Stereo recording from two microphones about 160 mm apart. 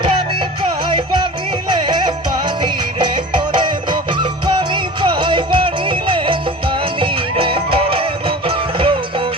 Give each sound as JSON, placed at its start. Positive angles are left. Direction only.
{"t": 0.9, "sound": "music", "side_deg": -30}